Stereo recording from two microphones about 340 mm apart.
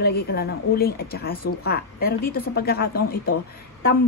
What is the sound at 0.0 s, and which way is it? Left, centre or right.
Speech, left.